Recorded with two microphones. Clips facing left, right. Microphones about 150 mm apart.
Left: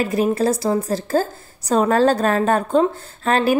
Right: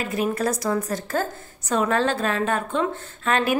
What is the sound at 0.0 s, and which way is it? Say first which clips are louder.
A woman's voice: left 6 dB; 35° left (ahead or behind).